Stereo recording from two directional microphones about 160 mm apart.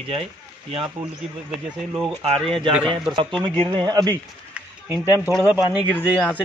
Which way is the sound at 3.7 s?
25° right (ahead or behind).